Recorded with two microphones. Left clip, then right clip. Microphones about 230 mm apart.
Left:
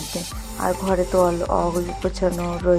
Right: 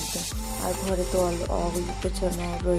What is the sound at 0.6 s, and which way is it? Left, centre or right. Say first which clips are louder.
Speech: left 7 dB; centre.